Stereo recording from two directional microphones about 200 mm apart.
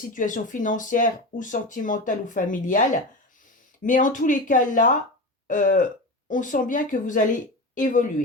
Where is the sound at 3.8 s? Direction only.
40° left (ahead or behind).